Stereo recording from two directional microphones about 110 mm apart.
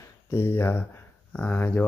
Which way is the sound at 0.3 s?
20° left (ahead or behind).